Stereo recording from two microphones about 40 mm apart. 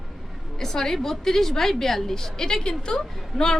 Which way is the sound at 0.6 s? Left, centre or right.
Centre.